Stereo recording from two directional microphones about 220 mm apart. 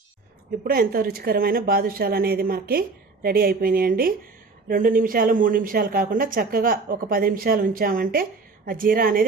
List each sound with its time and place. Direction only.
0.6 s speech: 40° right (ahead or behind)